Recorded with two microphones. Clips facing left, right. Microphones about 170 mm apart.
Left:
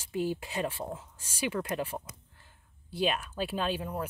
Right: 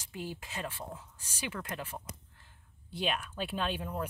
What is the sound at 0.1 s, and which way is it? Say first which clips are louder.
Speech: left 9 dB; 40° left (ahead or behind).